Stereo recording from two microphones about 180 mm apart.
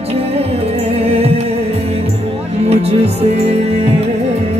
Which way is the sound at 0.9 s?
35° right (ahead or behind).